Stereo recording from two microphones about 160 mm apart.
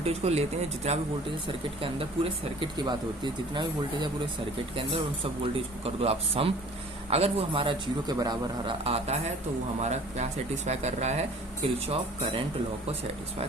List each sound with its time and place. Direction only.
0.0 s a man's voice: 40° right (ahead or behind)